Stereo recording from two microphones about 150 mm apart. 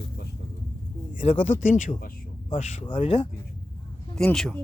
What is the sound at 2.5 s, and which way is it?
Speech, 45° left (ahead or behind).